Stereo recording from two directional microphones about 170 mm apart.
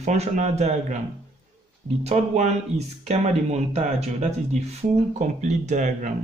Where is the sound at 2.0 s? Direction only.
40° right (ahead or behind).